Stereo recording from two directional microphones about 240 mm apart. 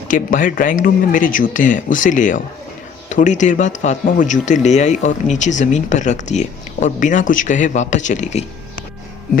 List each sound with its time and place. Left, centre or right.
0.1 s speech: left